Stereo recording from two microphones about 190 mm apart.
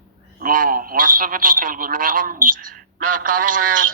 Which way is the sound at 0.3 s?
50° right (ahead or behind).